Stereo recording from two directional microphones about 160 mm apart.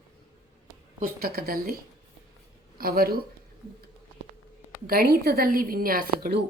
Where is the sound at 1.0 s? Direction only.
70° right (ahead or behind).